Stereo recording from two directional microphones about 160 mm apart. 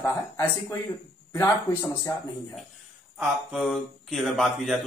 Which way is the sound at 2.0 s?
20° left (ahead or behind).